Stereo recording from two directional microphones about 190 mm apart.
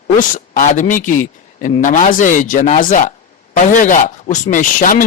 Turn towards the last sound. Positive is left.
turn(degrees=45)  # may be behind; listen again after turning